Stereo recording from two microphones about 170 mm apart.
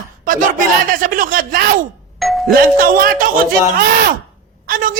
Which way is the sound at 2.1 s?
Centre (ahead or behind).